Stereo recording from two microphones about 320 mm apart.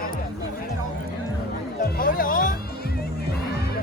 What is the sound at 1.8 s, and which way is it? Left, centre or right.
Speech, left.